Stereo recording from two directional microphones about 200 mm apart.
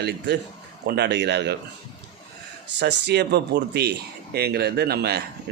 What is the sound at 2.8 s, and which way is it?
Speech, 55° right (ahead or behind).